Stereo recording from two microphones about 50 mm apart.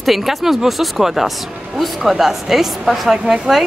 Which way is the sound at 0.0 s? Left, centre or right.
Centre.